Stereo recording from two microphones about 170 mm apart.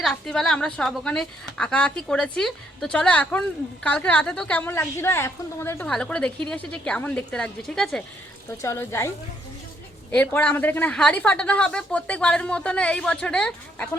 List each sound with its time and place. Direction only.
0.0 s a woman's voice: centre (ahead or behind)
8.4 s a woman's voice: 15° left (ahead or behind)